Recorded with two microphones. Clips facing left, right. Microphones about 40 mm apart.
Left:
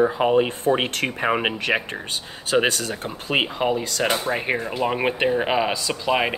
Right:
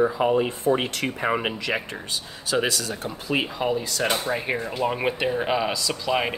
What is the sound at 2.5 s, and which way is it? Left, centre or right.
Speech, left.